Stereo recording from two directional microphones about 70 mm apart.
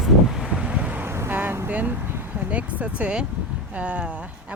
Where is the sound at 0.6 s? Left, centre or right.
Centre.